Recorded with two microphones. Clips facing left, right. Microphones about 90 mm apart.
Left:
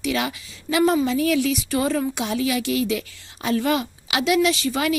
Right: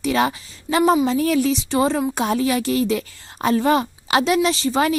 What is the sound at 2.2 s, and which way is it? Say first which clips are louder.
A woman's voice: right 3 dB; 40° right (ahead or behind).